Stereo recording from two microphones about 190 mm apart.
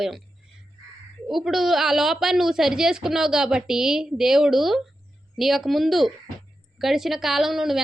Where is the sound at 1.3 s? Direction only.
Centre (ahead or behind).